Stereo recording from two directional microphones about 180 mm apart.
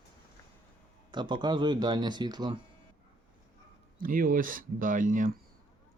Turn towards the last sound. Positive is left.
turn(degrees=-45)  # may be behind; listen again after turning